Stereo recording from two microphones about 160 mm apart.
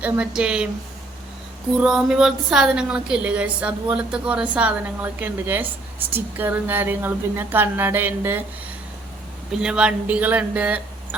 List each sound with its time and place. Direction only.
0.0 s a woman's voice: 5° right (ahead or behind)
1.8 s a woman's voice: 5° right (ahead or behind)
9.5 s a woman's voice: 5° right (ahead or behind)